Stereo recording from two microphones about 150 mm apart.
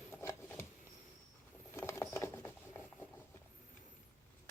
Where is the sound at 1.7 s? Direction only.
20° left (ahead or behind).